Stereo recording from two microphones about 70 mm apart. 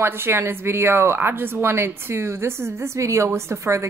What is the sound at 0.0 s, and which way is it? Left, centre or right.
Speech, right.